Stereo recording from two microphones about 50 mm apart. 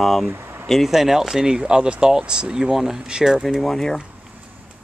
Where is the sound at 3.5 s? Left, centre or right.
Centre.